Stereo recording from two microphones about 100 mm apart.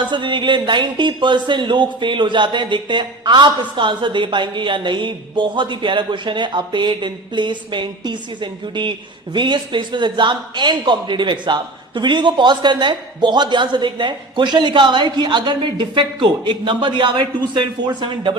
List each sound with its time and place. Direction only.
0.0 s speech: 50° right (ahead or behind)